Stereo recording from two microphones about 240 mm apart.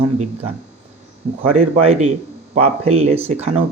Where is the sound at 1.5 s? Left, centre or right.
Right.